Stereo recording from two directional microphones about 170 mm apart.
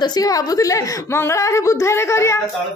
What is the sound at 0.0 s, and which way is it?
A woman's voice, 20° left (ahead or behind).